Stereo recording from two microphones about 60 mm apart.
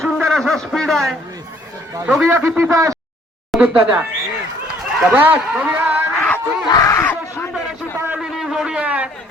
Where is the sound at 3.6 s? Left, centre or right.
Right.